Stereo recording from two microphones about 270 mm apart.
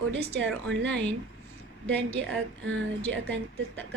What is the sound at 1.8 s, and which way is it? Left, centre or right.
Speech, centre.